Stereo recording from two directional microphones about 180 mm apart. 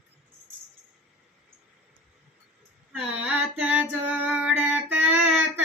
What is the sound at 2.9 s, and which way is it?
Female singing, 5° right (ahead or behind).